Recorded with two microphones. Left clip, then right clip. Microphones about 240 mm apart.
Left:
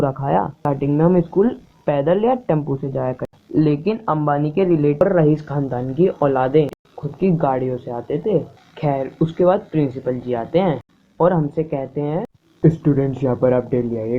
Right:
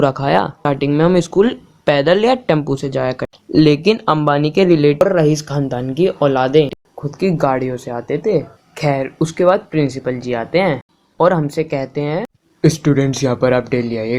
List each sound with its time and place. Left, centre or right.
0.0 s speech: right